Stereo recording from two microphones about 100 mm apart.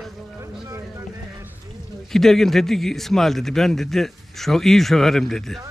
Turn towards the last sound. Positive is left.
turn(degrees=5)  # may be behind; listen again after turning